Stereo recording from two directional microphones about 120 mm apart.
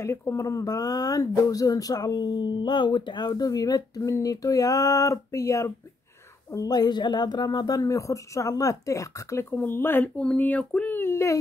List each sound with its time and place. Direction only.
0.0 s speech: 20° left (ahead or behind)